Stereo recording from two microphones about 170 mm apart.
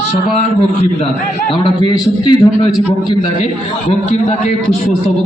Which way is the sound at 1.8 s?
25° left (ahead or behind).